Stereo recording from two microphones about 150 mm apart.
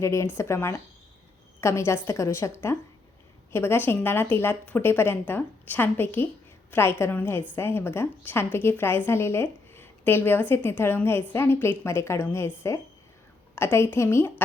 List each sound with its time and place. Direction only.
0.0 s a woman's voice: 20° left (ahead or behind)